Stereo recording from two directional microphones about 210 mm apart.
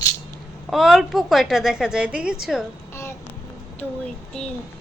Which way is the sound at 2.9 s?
10° left (ahead or behind).